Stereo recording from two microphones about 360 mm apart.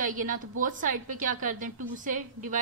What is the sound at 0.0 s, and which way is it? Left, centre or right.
Speech, right.